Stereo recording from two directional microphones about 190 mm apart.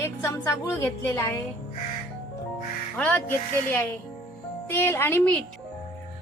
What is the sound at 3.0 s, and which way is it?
A woman's voice, 10° left (ahead or behind).